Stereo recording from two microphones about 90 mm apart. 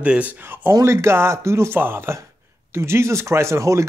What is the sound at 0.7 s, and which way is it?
Speech, 35° right (ahead or behind).